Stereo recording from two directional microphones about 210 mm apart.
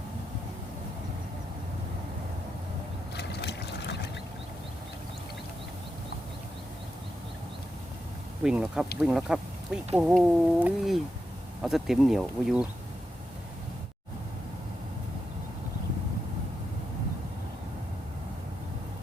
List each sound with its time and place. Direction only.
3.2 s boat: 50° left (ahead or behind)
8.4 s speech: 5° right (ahead or behind)